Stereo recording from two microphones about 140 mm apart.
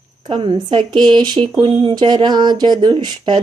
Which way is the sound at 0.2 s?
35° right (ahead or behind).